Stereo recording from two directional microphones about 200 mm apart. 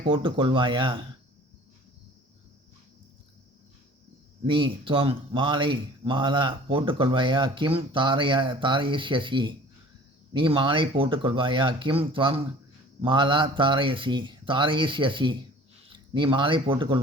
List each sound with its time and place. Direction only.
0.0 s speech: 25° right (ahead or behind)
4.4 s speech: 25° right (ahead or behind)